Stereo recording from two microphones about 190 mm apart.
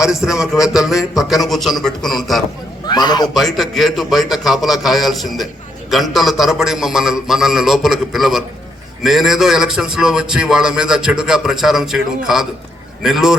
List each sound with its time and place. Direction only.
0.0 s a man's voice: centre (ahead or behind)
2.8 s a man's voice: 20° left (ahead or behind)
3.3 s a man's voice: centre (ahead or behind)